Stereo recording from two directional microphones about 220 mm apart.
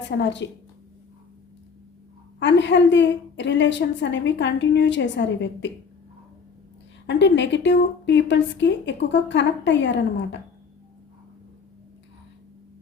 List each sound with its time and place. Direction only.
0.2 s a woman's voice: 55° left (ahead or behind)
2.4 s a woman's voice: 55° left (ahead or behind)
7.1 s a woman's voice: 50° left (ahead or behind)